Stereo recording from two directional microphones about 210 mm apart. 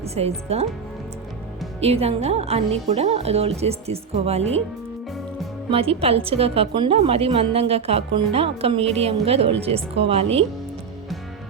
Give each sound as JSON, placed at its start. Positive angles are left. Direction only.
{"t": 0.0, "sound": "a woman's voice", "side_deg": -30}
{"t": 1.8, "sound": "a woman's voice", "side_deg": -30}
{"t": 5.7, "sound": "a woman's voice", "side_deg": -30}